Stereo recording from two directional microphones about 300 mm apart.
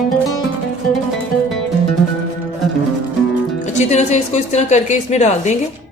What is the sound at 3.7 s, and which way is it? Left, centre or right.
Speech, left.